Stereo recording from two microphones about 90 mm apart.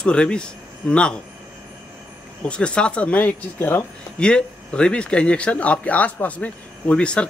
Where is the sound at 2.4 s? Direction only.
10° left (ahead or behind).